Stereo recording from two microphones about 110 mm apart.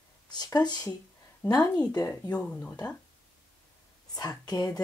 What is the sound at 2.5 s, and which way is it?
Speech, 10° left (ahead or behind).